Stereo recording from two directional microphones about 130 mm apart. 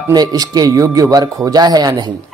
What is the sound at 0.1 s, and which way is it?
Speech, 30° right (ahead or behind).